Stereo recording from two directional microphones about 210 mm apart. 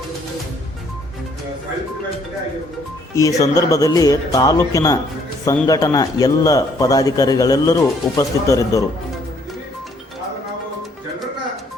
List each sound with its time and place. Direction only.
3.2 s a man's voice: 15° left (ahead or behind)